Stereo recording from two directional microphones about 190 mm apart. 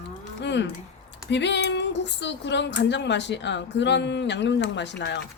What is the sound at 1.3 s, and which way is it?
Speech, 70° left (ahead or behind).